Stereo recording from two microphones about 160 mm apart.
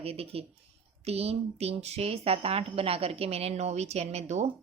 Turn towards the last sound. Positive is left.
turn(degrees=-45)  # may be behind; listen again after turning